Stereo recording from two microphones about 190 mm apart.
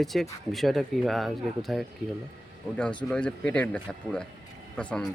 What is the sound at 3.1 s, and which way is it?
Speech, 5° left (ahead or behind).